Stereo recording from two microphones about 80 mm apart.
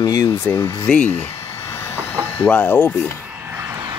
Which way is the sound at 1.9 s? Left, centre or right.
Left.